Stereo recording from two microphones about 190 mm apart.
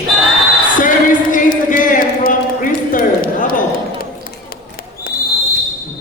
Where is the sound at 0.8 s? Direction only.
45° left (ahead or behind).